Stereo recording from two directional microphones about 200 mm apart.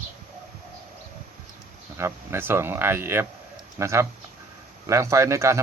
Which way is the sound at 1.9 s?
10° right (ahead or behind).